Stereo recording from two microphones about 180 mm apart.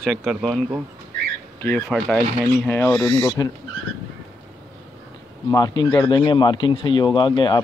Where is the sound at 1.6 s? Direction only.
5° left (ahead or behind).